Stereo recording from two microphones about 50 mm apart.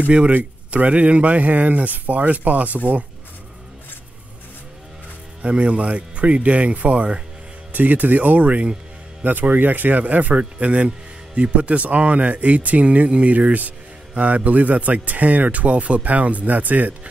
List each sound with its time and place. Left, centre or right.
0.0 s speech: right
5.4 s speech: right
7.7 s speech: right